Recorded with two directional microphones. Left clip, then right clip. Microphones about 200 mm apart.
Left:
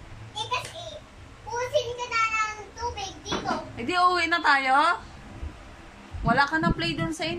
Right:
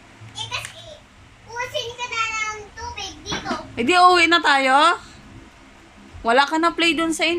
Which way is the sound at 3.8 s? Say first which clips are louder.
Right 9 dB; 20° right (ahead or behind).